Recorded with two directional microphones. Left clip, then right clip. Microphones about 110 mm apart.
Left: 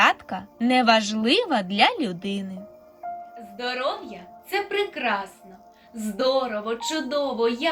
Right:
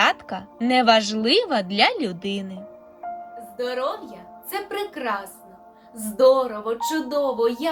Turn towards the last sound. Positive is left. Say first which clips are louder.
# right 2 dB
turn(degrees=-30)  # may be behind; listen again after turning